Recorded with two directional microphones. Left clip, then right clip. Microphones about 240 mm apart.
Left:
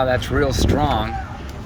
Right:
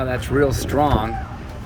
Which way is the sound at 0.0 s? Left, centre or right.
Centre.